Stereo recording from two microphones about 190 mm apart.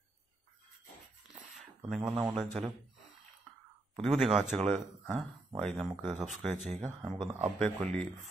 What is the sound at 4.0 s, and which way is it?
Speech, centre (ahead or behind).